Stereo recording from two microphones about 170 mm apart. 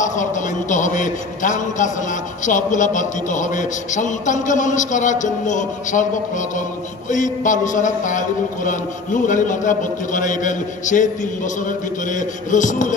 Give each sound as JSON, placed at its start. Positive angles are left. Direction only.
{"t": 0.0, "sound": "a man's voice", "side_deg": 45}